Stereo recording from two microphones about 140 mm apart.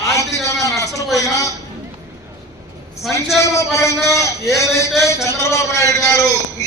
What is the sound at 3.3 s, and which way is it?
A man's voice, 20° left (ahead or behind).